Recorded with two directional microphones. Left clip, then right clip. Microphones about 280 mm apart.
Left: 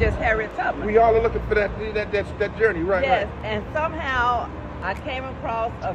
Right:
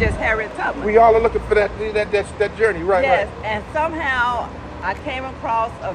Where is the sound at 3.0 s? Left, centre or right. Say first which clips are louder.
Right 4 dB; centre.